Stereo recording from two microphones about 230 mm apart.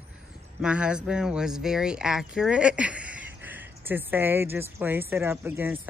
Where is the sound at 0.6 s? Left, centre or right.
Centre.